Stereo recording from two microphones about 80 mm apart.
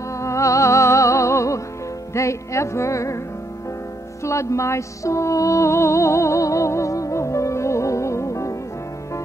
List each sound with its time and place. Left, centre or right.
0.1 s music: left
4.2 s music: left